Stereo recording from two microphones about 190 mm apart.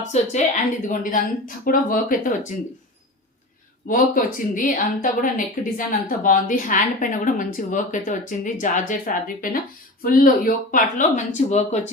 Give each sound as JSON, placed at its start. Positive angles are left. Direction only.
{"t": 0.0, "sound": "speech", "side_deg": 40}
{"t": 3.8, "sound": "speech", "side_deg": 45}